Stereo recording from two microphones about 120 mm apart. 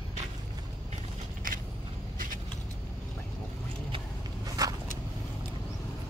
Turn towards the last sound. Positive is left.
turn(degrees=-30)  # may be behind; listen again after turning